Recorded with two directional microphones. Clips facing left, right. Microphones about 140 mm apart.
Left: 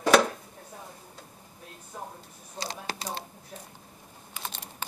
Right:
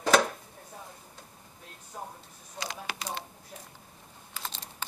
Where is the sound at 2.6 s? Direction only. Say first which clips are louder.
Left 2 dB; 35° left (ahead or behind).